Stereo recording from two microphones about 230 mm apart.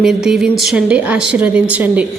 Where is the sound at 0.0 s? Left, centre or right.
Centre.